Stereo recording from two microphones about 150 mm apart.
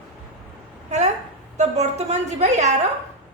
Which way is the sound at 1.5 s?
50° right (ahead or behind).